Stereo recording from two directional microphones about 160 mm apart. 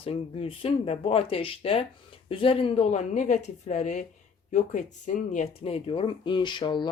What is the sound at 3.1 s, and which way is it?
A woman's voice, 50° left (ahead or behind).